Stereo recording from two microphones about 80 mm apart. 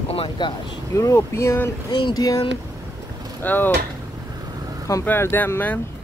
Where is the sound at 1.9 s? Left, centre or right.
Left.